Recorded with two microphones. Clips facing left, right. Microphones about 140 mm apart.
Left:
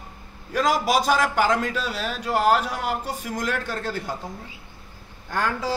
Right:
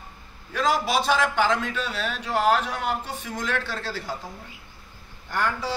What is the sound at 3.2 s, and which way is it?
Speech, 10° left (ahead or behind).